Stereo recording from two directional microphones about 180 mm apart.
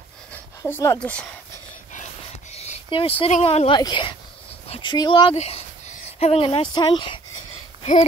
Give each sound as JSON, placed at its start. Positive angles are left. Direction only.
{"t": 0.6, "sound": "speech", "side_deg": 15}
{"t": 2.5, "sound": "speech", "side_deg": 35}
{"t": 7.8, "sound": "speech", "side_deg": 40}